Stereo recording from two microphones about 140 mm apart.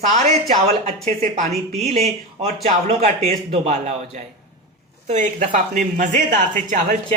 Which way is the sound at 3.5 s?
55° right (ahead or behind).